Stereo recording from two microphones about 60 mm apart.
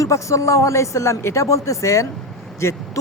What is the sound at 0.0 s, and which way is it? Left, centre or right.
Speech, left.